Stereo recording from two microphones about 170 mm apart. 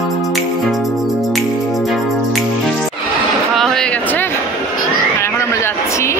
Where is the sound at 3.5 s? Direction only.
Centre (ahead or behind).